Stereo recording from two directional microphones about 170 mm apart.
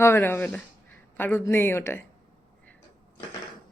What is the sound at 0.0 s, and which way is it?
Speech, 15° left (ahead or behind).